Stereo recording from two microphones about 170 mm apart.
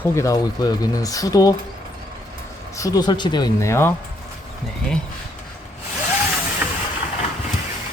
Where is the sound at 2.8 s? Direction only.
20° left (ahead or behind).